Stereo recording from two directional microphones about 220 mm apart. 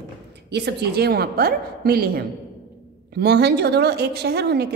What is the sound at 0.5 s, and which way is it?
A woman's voice, 50° right (ahead or behind).